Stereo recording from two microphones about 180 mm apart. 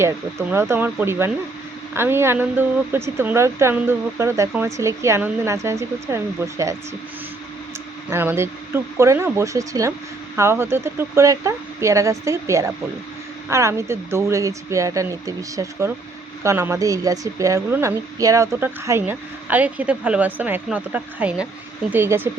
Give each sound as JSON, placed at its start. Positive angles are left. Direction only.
{"t": 0.5, "sound": "speech", "side_deg": -10}
{"t": 8.1, "sound": "speech", "side_deg": -15}